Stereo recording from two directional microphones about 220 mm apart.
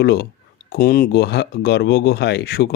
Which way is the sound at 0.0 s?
50° left (ahead or behind).